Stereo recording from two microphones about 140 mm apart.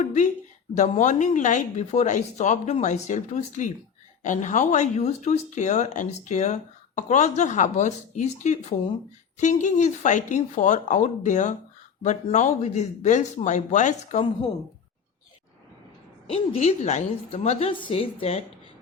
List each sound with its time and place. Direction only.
0.0 s speech: 60° left (ahead or behind)
16.3 s a woman's voice: 50° left (ahead or behind)
17.7 s a woman's voice: 35° left (ahead or behind)